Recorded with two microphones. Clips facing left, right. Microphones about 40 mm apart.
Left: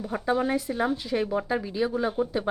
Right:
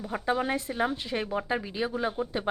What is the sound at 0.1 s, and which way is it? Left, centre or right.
A woman's voice, centre.